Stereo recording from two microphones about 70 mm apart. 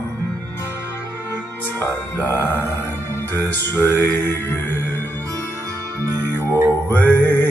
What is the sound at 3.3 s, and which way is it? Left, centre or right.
Music, left.